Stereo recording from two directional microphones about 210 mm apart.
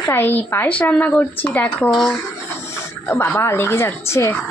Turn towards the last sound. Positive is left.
turn(degrees=10)  # may be behind; listen again after turning